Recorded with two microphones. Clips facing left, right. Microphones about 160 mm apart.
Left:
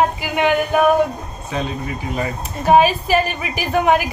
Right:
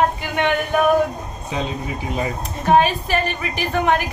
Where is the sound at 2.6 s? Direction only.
5° left (ahead or behind).